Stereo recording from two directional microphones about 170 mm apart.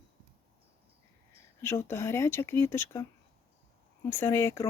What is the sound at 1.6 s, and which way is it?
Speech, 15° left (ahead or behind).